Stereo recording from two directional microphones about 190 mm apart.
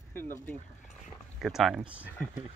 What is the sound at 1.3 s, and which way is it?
Speech, centre (ahead or behind).